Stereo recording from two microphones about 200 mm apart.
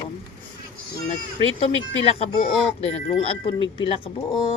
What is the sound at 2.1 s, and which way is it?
Speech, 30° left (ahead or behind).